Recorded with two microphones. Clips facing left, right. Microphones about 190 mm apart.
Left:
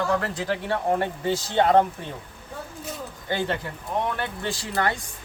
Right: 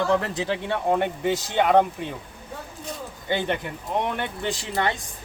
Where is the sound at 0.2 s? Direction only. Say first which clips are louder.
Right 1 dB; 20° right (ahead or behind).